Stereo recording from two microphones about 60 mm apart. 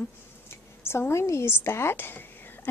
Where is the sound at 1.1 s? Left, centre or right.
Left.